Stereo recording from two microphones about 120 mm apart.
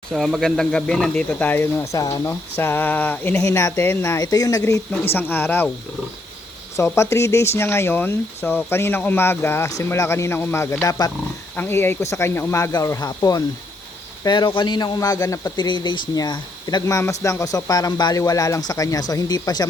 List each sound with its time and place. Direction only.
0.1 s speech: centre (ahead or behind); by 2.3 s 30° left (ahead or behind)
2.6 s speech: 15° left (ahead or behind)
5.0 s speech: 20° left (ahead or behind)
6.7 s a man's voice: 25° left (ahead or behind)
11.5 s a man's voice: 20° left (ahead or behind)
14.3 s a man's voice: 40° left (ahead or behind)